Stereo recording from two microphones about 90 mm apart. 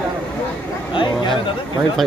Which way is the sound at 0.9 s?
65° left (ahead or behind).